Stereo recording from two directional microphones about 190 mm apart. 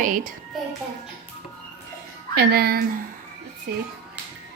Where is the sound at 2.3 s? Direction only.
55° right (ahead or behind).